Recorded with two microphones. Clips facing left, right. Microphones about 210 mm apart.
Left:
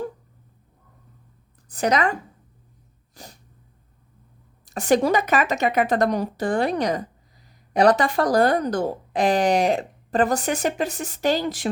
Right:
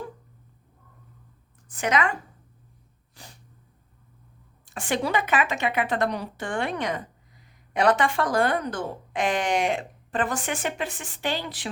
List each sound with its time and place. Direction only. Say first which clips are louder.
1.6 s speech: left 4 dB; 35° left (ahead or behind)
3.2 s sneeze: left 5 dB; 40° left (ahead or behind)
4.6 s speech: left 8 dB; 40° left (ahead or behind)